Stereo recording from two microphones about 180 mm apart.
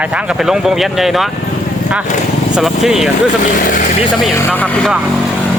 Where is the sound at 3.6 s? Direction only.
45° left (ahead or behind).